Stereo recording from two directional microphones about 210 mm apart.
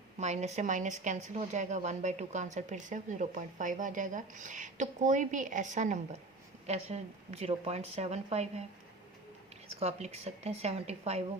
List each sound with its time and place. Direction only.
0.2 s a woman's voice: 30° right (ahead or behind)
9.8 s speech: 30° right (ahead or behind)